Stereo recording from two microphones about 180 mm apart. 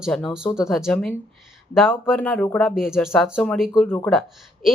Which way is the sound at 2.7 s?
5° right (ahead or behind).